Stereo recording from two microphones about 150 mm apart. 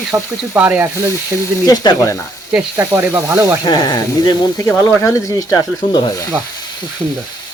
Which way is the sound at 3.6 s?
30° left (ahead or behind).